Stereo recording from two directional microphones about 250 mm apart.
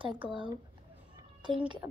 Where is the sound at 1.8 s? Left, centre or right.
Centre.